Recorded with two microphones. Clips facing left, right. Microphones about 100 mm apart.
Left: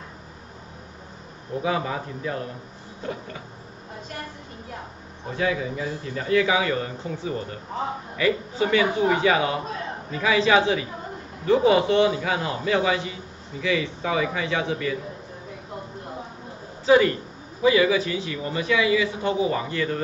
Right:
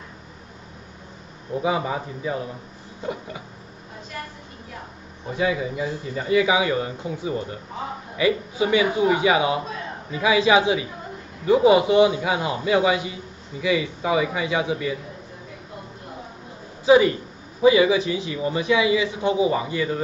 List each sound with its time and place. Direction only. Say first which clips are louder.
1.6 s a man's voice: right 2 dB; 15° right (ahead or behind)
5.3 s a man's voice: right 2 dB; 10° right (ahead or behind)
16.8 s a man's voice: right 2 dB; 15° right (ahead or behind)